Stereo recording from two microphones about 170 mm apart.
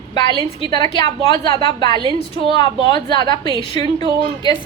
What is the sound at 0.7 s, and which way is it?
A woman's voice, 25° left (ahead or behind).